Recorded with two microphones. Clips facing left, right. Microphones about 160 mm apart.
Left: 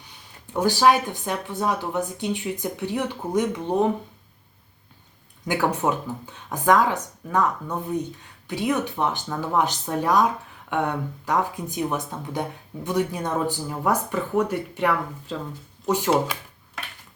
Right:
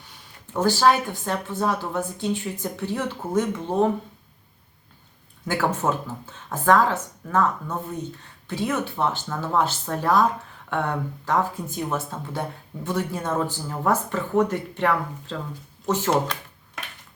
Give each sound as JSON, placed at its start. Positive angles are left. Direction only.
{"t": 0.5, "sound": "speech", "side_deg": 15}
{"t": 5.5, "sound": "speech", "side_deg": 15}